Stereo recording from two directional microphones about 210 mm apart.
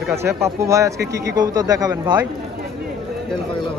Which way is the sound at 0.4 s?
15° right (ahead or behind).